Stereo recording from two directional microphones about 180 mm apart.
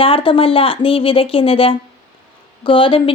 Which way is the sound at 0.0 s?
30° left (ahead or behind).